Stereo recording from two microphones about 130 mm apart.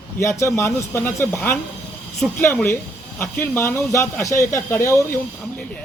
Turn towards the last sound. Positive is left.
turn(degrees=20)  # may be behind; listen again after turning